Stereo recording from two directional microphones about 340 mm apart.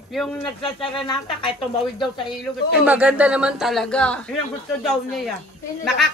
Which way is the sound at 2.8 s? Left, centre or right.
Centre.